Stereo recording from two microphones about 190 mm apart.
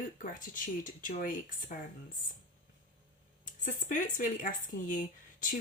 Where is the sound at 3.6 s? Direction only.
45° left (ahead or behind).